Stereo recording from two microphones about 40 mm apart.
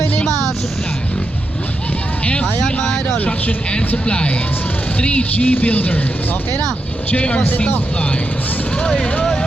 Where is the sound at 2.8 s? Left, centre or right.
Centre.